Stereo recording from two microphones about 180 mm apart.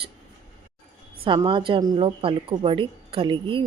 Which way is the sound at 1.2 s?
30° right (ahead or behind).